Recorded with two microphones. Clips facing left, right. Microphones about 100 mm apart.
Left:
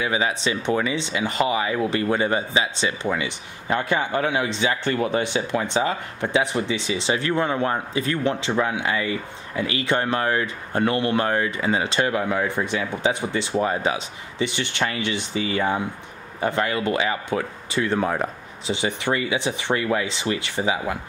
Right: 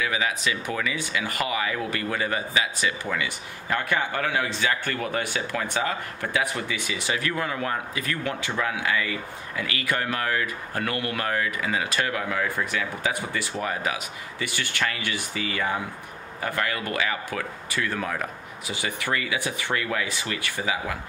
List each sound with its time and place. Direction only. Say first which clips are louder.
0.0 s speech: left 3 dB; 25° left (ahead or behind)